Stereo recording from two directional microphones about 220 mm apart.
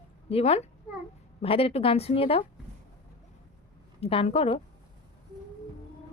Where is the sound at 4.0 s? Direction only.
25° left (ahead or behind).